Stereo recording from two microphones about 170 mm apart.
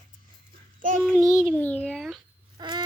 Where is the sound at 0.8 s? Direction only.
50° right (ahead or behind).